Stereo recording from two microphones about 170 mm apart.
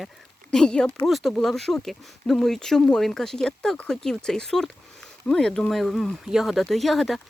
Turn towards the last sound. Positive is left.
turn(degrees=0)  # may be behind; listen again after turning